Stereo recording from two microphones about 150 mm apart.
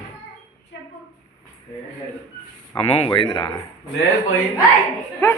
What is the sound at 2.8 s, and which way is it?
Speech, 40° left (ahead or behind).